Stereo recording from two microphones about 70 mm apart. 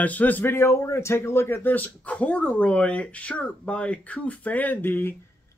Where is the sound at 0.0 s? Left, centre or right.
Left.